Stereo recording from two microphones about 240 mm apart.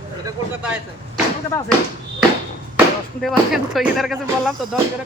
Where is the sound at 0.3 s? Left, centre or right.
Centre.